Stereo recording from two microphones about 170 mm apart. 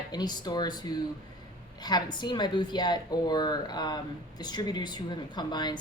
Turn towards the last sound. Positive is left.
turn(degrees=25)  # may be behind; listen again after turning